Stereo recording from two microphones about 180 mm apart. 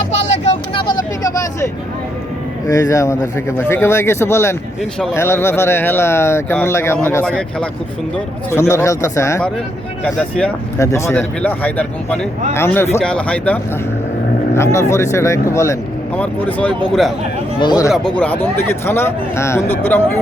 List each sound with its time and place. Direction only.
0.4 s vehicle: 30° left (ahead or behind)
2.6 s speech: 20° left (ahead or behind)
8.4 s speech: 15° left (ahead or behind)
17.6 s speech: 20° left (ahead or behind)
17.9 s speech: 5° left (ahead or behind)